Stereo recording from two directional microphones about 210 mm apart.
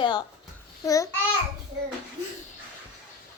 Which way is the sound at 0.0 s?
20° left (ahead or behind).